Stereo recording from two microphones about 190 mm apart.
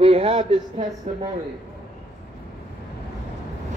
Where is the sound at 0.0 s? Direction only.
30° right (ahead or behind).